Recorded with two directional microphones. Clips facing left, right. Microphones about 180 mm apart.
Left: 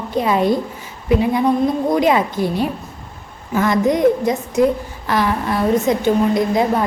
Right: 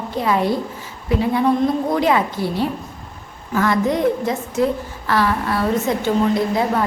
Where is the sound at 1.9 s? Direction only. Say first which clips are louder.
Left 2 dB; 15° left (ahead or behind).